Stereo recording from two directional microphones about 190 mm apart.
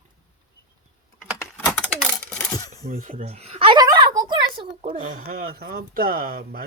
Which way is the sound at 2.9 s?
45° right (ahead or behind).